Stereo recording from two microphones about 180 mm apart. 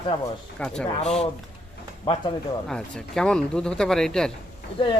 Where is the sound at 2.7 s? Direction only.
5° left (ahead or behind).